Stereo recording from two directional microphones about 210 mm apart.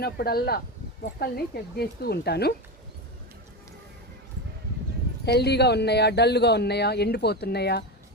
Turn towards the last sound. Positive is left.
turn(degrees=50)  # may be behind; listen again after turning